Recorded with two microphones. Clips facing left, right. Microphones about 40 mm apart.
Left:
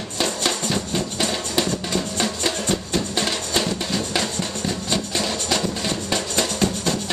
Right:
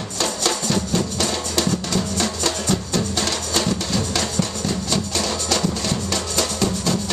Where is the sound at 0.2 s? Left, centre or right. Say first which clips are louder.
Even; centre.